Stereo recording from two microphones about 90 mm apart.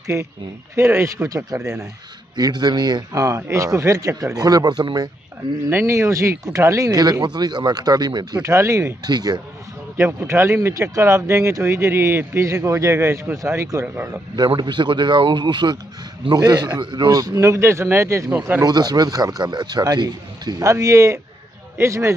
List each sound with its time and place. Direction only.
0.0 s speech: 30° right (ahead or behind)
2.3 s a man's voice: 50° right (ahead or behind)
3.3 s speech: 35° right (ahead or behind); by 5.1 s 55° right (ahead or behind)
5.7 s a man's voice: 30° right (ahead or behind); by 8.4 s 50° right (ahead or behind)
8.4 s speech: 35° right (ahead or behind)
9.0 s a man's voice: 50° right (ahead or behind)
9.9 s speech: 25° right (ahead or behind)
14.6 s a man's voice: 60° right (ahead or behind); by 17.4 s 40° right (ahead or behind)
17.4 s speech: 30° right (ahead or behind)
18.6 s a man's voice: 50° right (ahead or behind)
20.6 s speech: 35° right (ahead or behind)